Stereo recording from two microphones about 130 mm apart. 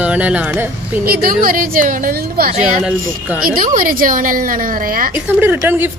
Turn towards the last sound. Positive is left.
turn(degrees=-15)  # may be behind; listen again after turning